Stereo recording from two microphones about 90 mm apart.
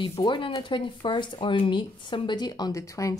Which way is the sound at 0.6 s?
65° left (ahead or behind).